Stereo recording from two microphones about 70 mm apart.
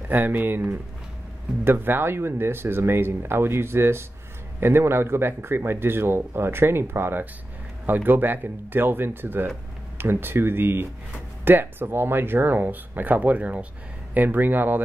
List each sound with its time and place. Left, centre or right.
0.1 s speech: right